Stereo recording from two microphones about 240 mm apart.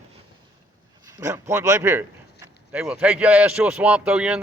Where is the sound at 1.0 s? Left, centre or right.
Centre.